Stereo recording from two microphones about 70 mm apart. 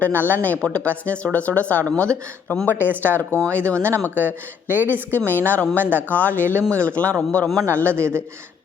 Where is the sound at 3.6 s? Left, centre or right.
Right.